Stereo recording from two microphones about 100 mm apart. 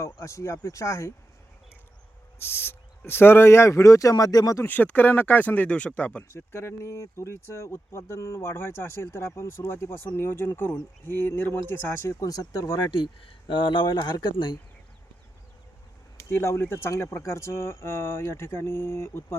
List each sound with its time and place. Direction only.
0.2 s speech: 30° left (ahead or behind)
2.4 s speech: 25° left (ahead or behind)
4.6 s speech: 15° left (ahead or behind)
6.2 s speech: 25° left (ahead or behind)
12.9 s speech: 55° left (ahead or behind)
16.3 s speech: 25° left (ahead or behind)